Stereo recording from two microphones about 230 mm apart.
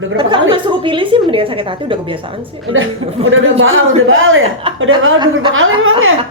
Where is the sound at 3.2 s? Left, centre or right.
Right.